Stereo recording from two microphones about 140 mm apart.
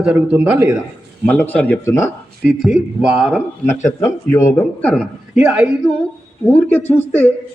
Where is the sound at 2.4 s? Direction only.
Centre (ahead or behind).